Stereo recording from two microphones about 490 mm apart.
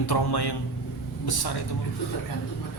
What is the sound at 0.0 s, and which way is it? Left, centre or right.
Speech, left.